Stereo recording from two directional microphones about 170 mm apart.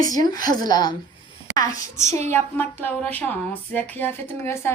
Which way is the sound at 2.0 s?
40° right (ahead or behind).